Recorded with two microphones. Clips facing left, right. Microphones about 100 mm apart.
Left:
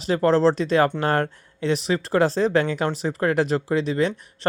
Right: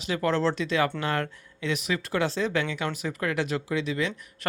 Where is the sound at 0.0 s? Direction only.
35° left (ahead or behind).